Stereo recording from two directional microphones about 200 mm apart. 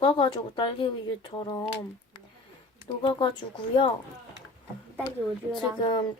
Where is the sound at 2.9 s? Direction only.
25° left (ahead or behind).